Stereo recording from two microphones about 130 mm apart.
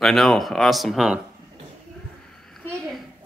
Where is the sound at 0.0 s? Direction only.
Centre (ahead or behind).